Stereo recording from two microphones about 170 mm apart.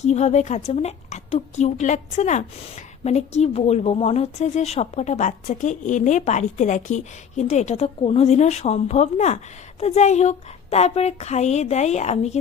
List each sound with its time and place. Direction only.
0.0 s speech: 40° left (ahead or behind)